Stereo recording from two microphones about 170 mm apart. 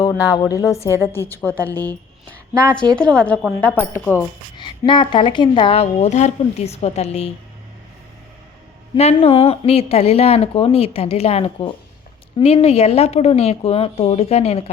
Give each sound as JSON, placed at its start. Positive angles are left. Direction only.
{"t": 0.0, "sound": "a woman's voice", "side_deg": 20}
{"t": 4.5, "sound": "a woman's voice", "side_deg": 25}
{"t": 9.2, "sound": "a woman's voice", "side_deg": 35}